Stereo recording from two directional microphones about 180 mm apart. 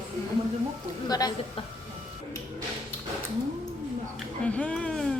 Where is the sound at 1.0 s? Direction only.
20° left (ahead or behind).